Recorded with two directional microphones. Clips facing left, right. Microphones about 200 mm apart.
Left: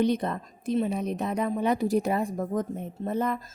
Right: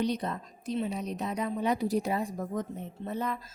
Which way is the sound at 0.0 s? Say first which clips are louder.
Left 5 dB; 50° left (ahead or behind).